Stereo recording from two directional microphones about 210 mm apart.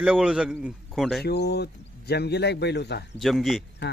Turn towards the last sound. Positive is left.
turn(degrees=0)  # may be behind; listen again after turning